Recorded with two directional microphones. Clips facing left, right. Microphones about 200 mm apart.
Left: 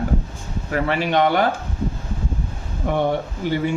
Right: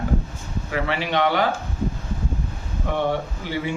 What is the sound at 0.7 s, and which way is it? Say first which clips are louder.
Speech: left 4 dB; 45° left (ahead or behind).